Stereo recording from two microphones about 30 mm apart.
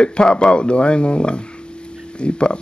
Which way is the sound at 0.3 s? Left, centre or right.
Left.